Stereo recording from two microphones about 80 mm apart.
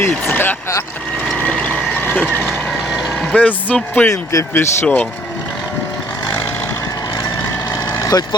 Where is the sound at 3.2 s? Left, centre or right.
Centre.